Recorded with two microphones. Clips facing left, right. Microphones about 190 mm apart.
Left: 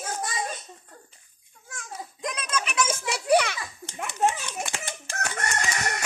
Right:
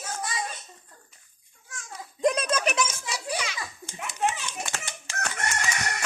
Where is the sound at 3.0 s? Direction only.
65° left (ahead or behind).